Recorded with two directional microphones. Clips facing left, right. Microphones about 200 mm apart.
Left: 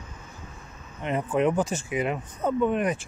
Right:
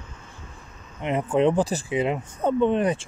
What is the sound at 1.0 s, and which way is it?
Speech, 25° right (ahead or behind).